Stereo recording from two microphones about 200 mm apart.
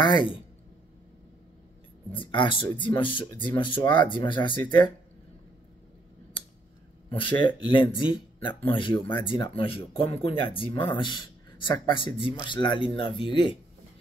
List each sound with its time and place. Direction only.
0.0 s speech: 25° left (ahead or behind)
2.1 s speech: 25° left (ahead or behind)
8.0 s a man's voice: 25° left (ahead or behind)